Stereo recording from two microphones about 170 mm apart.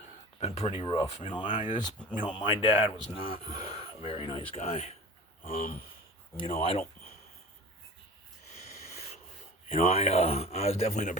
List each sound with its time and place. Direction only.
0.3 s speech: 40° left (ahead or behind)
2.2 s speech: 30° left (ahead or behind)
5.4 s speech: 55° left (ahead or behind)
6.6 s speech: 35° left (ahead or behind)
9.6 s speech: 35° left (ahead or behind)